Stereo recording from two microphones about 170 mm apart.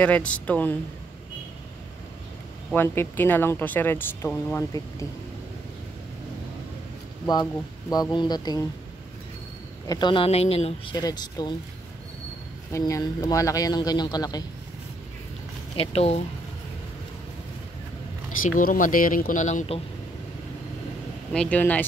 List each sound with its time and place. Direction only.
0.0 s speech: 5° left (ahead or behind)
2.7 s speech: 10° left (ahead or behind)
7.9 s a man's voice: 25° left (ahead or behind)
9.8 s speech: 25° left (ahead or behind)
11.0 s a man's voice: 25° left (ahead or behind)
12.7 s a man's voice: 20° left (ahead or behind)
15.7 s speech: 35° left (ahead or behind)
18.5 s speech: 50° left (ahead or behind)
21.3 s speech: 5° left (ahead or behind)